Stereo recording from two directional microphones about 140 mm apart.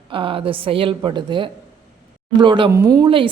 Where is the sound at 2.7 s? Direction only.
25° right (ahead or behind).